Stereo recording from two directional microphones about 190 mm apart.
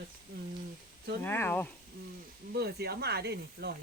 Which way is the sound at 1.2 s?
10° left (ahead or behind).